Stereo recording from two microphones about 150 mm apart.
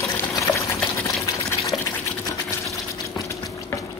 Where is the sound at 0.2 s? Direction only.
20° left (ahead or behind).